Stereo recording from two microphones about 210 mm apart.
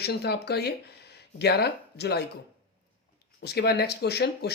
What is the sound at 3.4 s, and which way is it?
Speech, 50° left (ahead or behind).